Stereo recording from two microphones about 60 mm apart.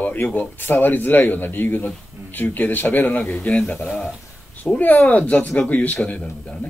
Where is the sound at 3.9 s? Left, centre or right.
Centre.